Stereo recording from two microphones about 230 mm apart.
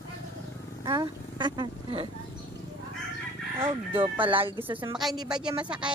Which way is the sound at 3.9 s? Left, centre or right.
Right.